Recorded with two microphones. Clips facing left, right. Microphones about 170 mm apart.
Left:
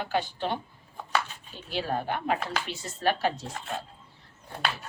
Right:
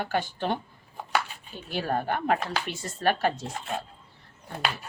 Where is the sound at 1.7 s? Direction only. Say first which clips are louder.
Right 2 dB; 50° right (ahead or behind).